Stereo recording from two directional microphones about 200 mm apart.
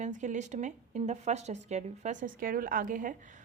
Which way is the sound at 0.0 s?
35° right (ahead or behind).